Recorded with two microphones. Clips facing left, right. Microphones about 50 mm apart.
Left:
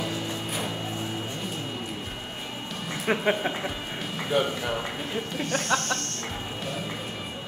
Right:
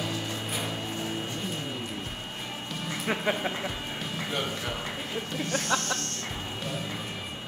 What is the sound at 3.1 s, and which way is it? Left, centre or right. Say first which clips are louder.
Speech: left 5 dB; left.